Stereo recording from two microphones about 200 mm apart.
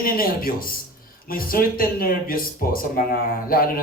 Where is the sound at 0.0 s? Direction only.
45° left (ahead or behind).